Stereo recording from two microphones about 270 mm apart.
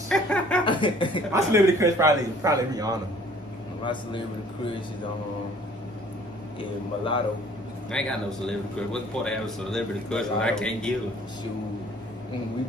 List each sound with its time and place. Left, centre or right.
0.1 s chuckle: centre
0.7 s speech: centre
1.3 s a man's voice: centre
3.8 s a man's voice: centre
7.9 s a man's voice: centre